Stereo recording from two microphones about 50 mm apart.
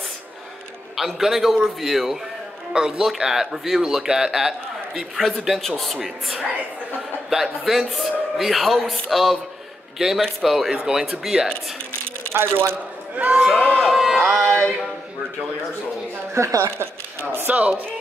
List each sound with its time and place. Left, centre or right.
0.9 s speech: centre
7.2 s speech: centre
12.2 s speech: right
13.1 s speech: right
13.7 s music: centre
16.3 s a woman's voice: right
17.5 s speech: right